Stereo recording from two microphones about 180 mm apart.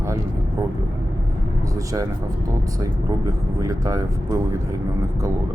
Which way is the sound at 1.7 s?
20° right (ahead or behind).